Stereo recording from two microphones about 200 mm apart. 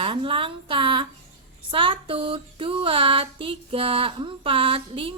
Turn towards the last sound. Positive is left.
turn(degrees=-25)  # may be behind; listen again after turning